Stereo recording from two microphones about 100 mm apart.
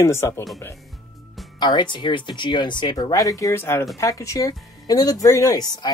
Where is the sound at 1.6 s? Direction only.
50° left (ahead or behind).